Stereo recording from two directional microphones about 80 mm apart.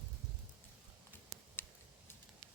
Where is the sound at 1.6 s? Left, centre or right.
Left.